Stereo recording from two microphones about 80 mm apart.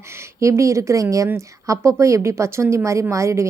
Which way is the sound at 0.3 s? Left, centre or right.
Right.